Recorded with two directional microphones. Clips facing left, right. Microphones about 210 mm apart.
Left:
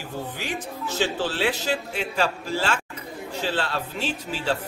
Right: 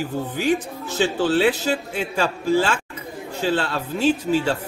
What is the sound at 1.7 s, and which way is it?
A man's voice, 50° right (ahead or behind).